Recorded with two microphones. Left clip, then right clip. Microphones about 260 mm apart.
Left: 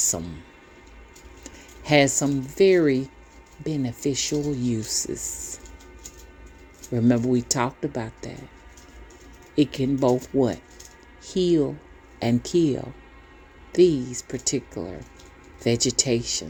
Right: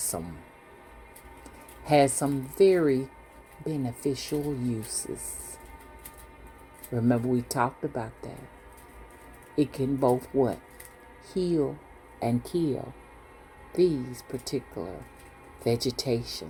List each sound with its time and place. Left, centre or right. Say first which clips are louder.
0.0 s speech: left 8 dB; left
1.5 s speech: left 2 dB; left
6.9 s speech: left 5 dB; left
9.6 s speech: left 4 dB; left